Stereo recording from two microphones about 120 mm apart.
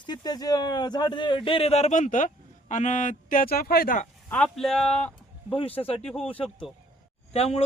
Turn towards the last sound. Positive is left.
turn(degrees=55)  # may be behind; listen again after turning